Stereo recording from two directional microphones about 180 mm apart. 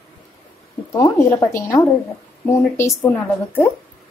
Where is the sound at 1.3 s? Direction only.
15° left (ahead or behind).